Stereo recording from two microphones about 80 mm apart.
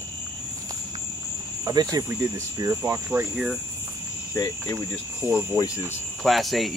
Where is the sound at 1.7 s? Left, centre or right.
Right.